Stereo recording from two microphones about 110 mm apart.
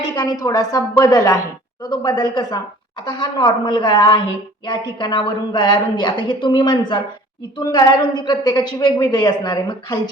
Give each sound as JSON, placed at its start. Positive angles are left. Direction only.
{"t": 0.2, "sound": "a woman's voice", "side_deg": 35}